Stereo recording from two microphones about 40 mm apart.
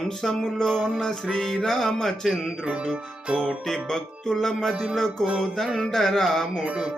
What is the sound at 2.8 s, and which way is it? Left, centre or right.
Music, right.